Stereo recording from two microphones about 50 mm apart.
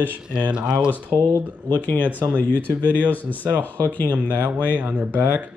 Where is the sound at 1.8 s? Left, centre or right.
Left.